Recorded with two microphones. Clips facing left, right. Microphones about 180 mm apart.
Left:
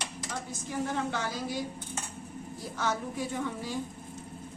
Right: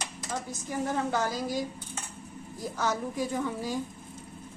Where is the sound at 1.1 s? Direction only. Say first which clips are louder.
Right 4 dB; 40° right (ahead or behind).